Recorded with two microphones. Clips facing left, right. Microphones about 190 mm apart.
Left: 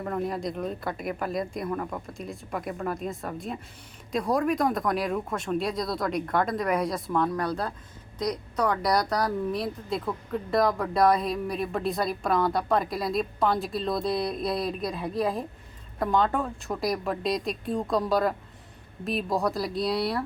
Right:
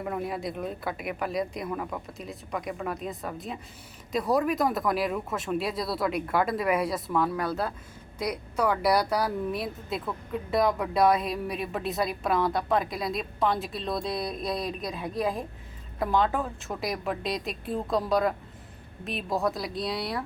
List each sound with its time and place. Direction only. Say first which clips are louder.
0.0 s speech: left 2 dB; 5° right (ahead or behind)